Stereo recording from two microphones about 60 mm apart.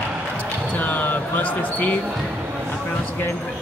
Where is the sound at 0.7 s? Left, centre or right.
Left.